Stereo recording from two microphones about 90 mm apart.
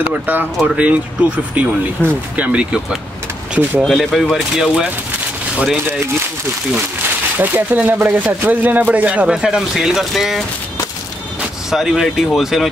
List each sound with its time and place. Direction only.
0.1 s speech: 20° right (ahead or behind)
3.8 s speech: centre (ahead or behind)
7.3 s speech: 20° right (ahead or behind); by 10.4 s 5° right (ahead or behind)
11.7 s speech: 5° right (ahead or behind)